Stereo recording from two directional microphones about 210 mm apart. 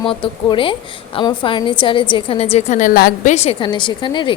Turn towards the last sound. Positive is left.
turn(degrees=20)  # may be behind; listen again after turning